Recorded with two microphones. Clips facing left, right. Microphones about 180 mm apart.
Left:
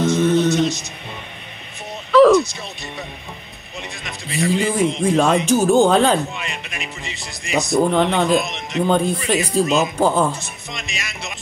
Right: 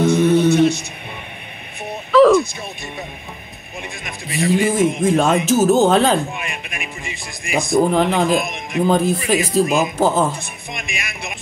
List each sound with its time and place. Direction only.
0.0 s a sound: 15° right (ahead or behind)
0.5 s music: 60° right (ahead or behind)
2.1 s a sound: centre (ahead or behind)
4.3 s speech: centre (ahead or behind)
6.3 s music: 15° right (ahead or behind)
7.5 s speech: centre (ahead or behind)
10.4 s music: 55° right (ahead or behind)